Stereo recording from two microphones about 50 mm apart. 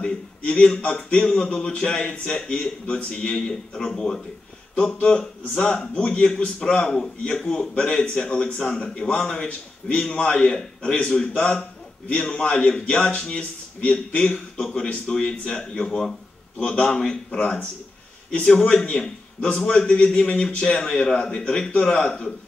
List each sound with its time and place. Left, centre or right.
0.0 s a man's voice: centre
17.4 s a man's voice: left
18.4 s a man's voice: centre